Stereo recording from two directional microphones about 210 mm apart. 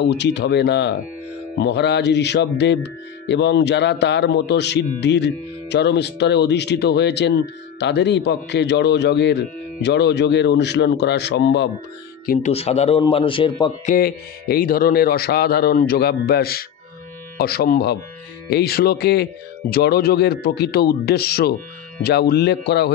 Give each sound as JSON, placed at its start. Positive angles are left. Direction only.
{"t": 0.0, "sound": "speech", "side_deg": 55}
{"t": 12.3, "sound": "a man's voice", "side_deg": 35}
{"t": 13.8, "sound": "speech", "side_deg": 45}